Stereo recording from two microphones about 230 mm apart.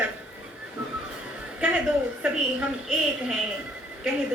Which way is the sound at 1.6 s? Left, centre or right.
Centre.